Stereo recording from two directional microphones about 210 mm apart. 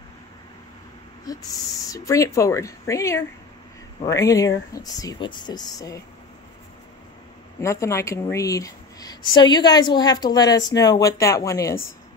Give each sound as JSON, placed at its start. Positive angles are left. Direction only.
{"t": 1.9, "sound": "a woman's voice", "side_deg": 15}
{"t": 7.6, "sound": "a woman's voice", "side_deg": 15}